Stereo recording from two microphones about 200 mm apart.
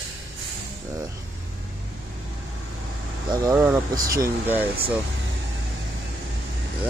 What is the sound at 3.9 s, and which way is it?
Speech, 15° right (ahead or behind).